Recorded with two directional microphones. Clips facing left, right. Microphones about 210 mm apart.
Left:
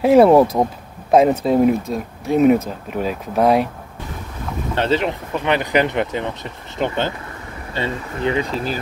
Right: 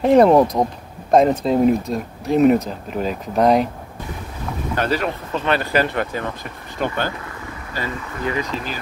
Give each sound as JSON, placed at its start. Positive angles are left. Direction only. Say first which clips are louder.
{"t": 0.0, "sound": "speech", "louder": "left 2 dB", "side_deg": 5}
{"t": 4.7, "sound": "speech", "louder": "left 3 dB", "side_deg": 25}